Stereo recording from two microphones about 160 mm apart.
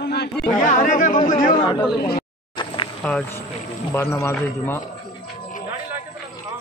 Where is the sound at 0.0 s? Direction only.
90° left.